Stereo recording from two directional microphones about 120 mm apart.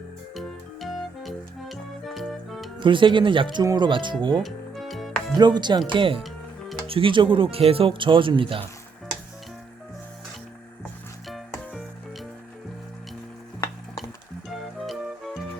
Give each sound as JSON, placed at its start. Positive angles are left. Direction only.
{"t": 0.3, "sound": "music", "side_deg": 0}
{"t": 2.7, "sound": "speech", "side_deg": -45}
{"t": 4.4, "sound": "music", "side_deg": 0}
{"t": 5.4, "sound": "speech", "side_deg": -40}
{"t": 11.7, "sound": "music", "side_deg": -5}
{"t": 14.5, "sound": "music", "side_deg": 0}